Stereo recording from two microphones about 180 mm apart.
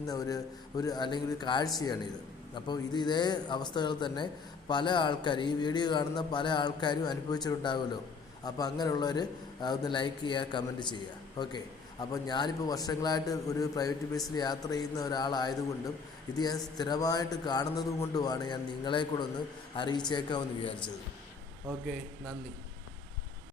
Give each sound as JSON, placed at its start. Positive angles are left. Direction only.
{"t": 0.0, "sound": "a man's voice", "side_deg": 20}